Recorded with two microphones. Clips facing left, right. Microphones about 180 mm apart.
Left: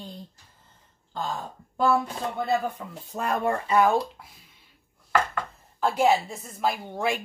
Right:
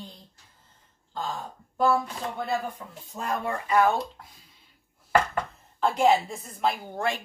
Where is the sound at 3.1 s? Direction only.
60° left (ahead or behind).